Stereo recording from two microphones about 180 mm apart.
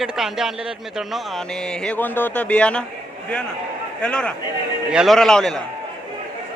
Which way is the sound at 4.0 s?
5° left (ahead or behind).